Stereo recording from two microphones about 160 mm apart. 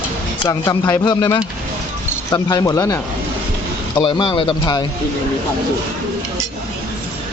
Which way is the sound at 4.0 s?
30° left (ahead or behind).